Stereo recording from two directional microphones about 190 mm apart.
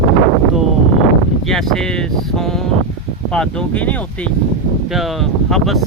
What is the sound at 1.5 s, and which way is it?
Speech, centre (ahead or behind).